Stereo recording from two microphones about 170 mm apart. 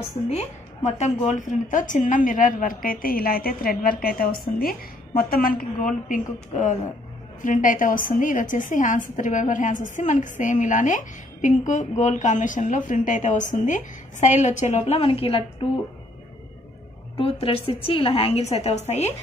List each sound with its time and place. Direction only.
0.3 s a woman's voice: 40° left (ahead or behind)
17.2 s a woman's voice: 35° left (ahead or behind)